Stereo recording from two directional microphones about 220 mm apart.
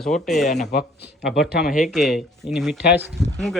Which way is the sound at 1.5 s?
45° left (ahead or behind).